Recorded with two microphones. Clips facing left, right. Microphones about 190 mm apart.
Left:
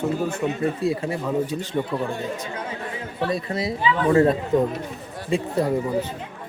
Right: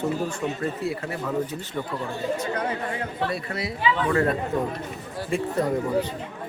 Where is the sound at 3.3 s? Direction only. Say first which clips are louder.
Left 4 dB; 25° left (ahead or behind).